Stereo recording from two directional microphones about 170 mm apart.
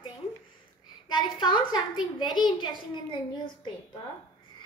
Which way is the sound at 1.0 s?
30° left (ahead or behind).